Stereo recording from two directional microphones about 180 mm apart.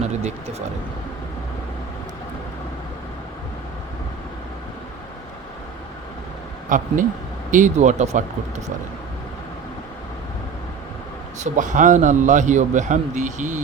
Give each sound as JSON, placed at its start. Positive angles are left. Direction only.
{"t": 0.0, "sound": "a sound", "side_deg": -40}
{"t": 6.7, "sound": "a man's voice", "side_deg": -45}
{"t": 11.3, "sound": "a man's voice", "side_deg": -40}